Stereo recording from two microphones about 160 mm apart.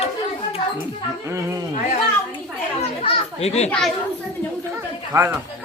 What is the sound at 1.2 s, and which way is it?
Speech, 20° right (ahead or behind).